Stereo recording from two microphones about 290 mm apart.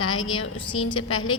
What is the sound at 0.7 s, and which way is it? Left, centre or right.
Speech, centre.